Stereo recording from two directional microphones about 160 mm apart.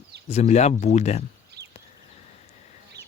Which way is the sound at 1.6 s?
90° right.